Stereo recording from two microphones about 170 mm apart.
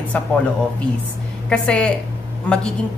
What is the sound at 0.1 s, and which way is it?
Speech, 10° left (ahead or behind).